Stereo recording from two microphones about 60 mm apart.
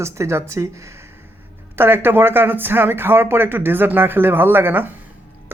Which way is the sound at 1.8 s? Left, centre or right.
Right.